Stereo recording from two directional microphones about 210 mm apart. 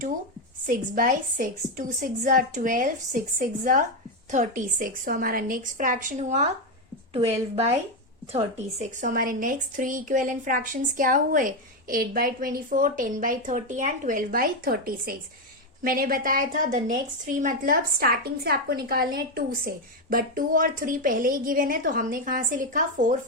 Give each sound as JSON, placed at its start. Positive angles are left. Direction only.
{"t": 0.7, "sound": "a woman's voice", "side_deg": -40}
{"t": 7.5, "sound": "a woman's voice", "side_deg": -30}